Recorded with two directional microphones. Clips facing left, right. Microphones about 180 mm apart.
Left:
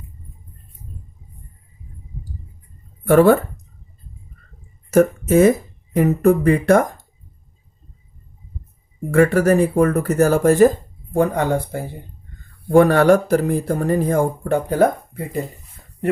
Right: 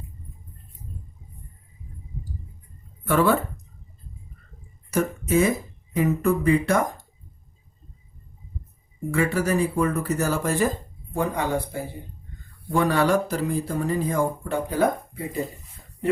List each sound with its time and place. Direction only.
3.0 s speech: 50° left (ahead or behind)
4.9 s speech: 50° left (ahead or behind)
9.1 s speech: 55° left (ahead or behind)